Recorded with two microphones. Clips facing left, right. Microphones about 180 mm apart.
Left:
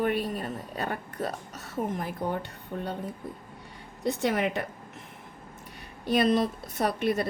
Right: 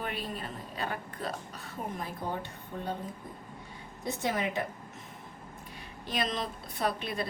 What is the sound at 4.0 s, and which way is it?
Speech, 70° left (ahead or behind).